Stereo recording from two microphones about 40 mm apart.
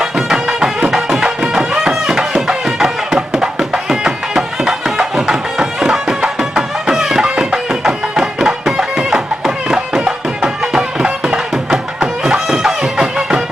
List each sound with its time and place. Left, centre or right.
0.0 s music: centre